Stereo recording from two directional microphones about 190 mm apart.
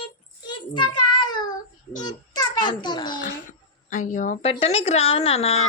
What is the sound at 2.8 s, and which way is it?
Speech, 25° left (ahead or behind).